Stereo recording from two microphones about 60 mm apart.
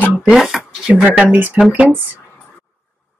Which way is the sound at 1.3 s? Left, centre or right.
Right.